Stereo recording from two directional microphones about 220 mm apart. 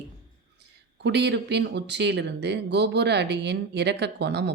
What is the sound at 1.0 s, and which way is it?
Speech, 50° right (ahead or behind).